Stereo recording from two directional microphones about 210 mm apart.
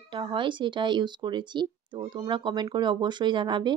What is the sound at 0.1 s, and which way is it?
Speech, 25° right (ahead or behind).